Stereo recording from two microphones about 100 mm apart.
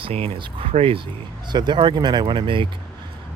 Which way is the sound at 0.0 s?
70° right (ahead or behind).